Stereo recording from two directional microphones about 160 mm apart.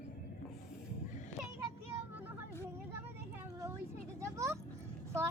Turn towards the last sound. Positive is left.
turn(degrees=-20)  # may be behind; listen again after turning